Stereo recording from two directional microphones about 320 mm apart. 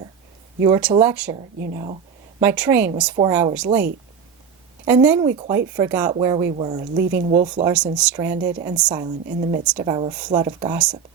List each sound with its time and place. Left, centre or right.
0.6 s speech: centre
1.5 s speech: right
2.4 s speech: centre
4.9 s speech: centre
6.9 s speech: right
7.3 s speech: centre